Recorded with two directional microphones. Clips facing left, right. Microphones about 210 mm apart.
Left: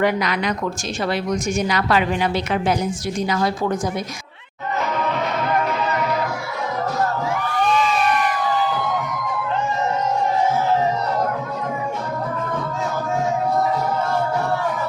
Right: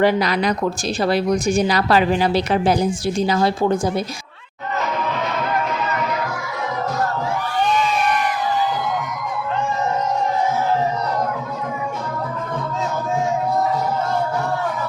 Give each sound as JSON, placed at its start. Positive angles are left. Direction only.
{"t": 0.0, "sound": "a woman's voice", "side_deg": -30}